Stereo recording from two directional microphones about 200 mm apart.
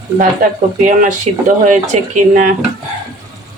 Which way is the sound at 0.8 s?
40° right (ahead or behind).